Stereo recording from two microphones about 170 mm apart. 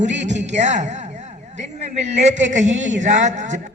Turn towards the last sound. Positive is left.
turn(degrees=-45)  # may be behind; listen again after turning